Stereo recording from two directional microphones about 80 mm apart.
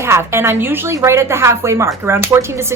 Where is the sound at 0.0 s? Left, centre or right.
Right.